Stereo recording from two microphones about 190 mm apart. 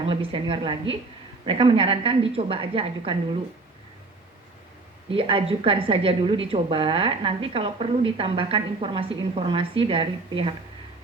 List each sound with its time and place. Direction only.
0.0 s a woman's voice: 30° right (ahead or behind)
5.0 s a woman's voice: 30° right (ahead or behind)